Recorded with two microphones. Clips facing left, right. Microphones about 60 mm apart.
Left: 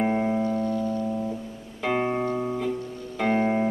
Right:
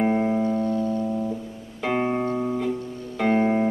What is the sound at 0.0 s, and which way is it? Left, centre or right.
Music, centre.